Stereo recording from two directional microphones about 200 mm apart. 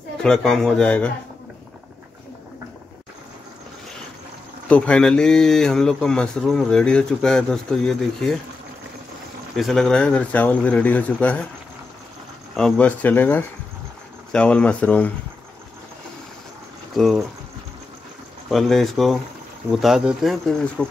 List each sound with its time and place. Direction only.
0.2 s speech: 5° left (ahead or behind)
4.6 s speech: 5° left (ahead or behind)
9.6 s speech: centre (ahead or behind)
12.5 s speech: 5° left (ahead or behind)
16.9 s speech: centre (ahead or behind)
18.5 s speech: centre (ahead or behind)